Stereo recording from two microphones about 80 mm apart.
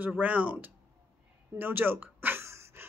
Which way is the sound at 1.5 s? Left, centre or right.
Right.